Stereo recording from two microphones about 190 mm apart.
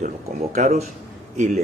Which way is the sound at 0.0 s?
40° right (ahead or behind).